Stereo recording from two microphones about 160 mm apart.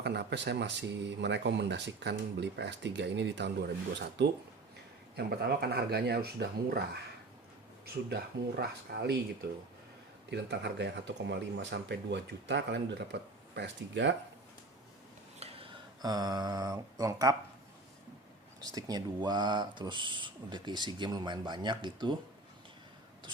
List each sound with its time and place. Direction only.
0.0 s speech: 90° right
5.1 s speech: 85° right
8.1 s speech: 85° right
10.2 s speech: 90° right
15.4 s a sound: 40° right (ahead or behind)
16.0 s speech: 25° right (ahead or behind)
18.6 s speech: 25° right (ahead or behind)